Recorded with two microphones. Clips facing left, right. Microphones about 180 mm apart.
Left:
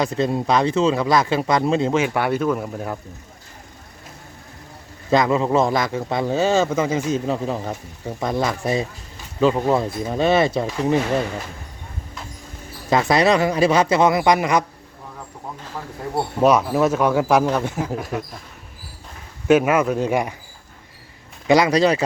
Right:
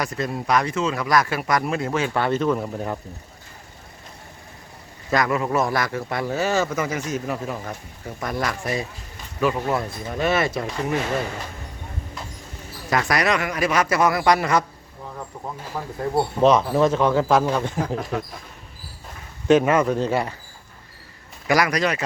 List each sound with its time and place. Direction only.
0.0 s speech: 25° left (ahead or behind); by 3.0 s centre (ahead or behind)
5.1 s speech: 25° left (ahead or behind)
12.9 s speech: 25° left (ahead or behind)
16.4 s speech: 10° left (ahead or behind)
19.5 s speech: 5° left (ahead or behind)
21.4 s speech: 25° left (ahead or behind)